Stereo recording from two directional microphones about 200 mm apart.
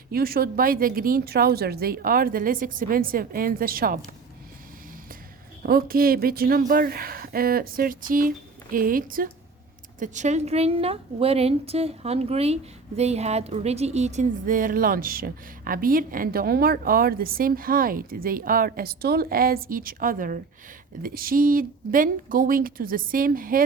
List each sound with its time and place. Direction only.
0.1 s speech: 50° right (ahead or behind)
5.6 s a woman's voice: 45° right (ahead or behind)